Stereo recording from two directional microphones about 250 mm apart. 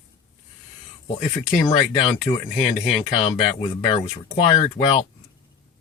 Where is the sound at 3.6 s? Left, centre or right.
Left.